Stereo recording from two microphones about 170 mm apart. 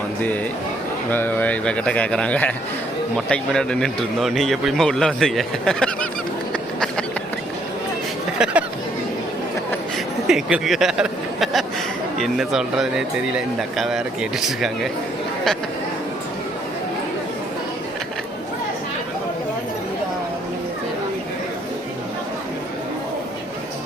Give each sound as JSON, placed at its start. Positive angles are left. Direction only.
{"t": 1.1, "sound": "a man's voice", "side_deg": 10}
{"t": 6.5, "sound": "a sound", "side_deg": 5}
{"t": 8.4, "sound": "chatter", "side_deg": -5}
{"t": 10.2, "sound": "speech", "side_deg": 0}